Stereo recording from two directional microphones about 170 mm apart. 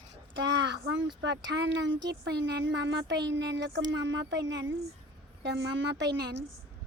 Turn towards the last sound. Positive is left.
turn(degrees=-90)